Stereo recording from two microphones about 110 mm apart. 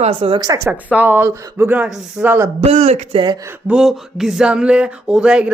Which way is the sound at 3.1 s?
45° right (ahead or behind).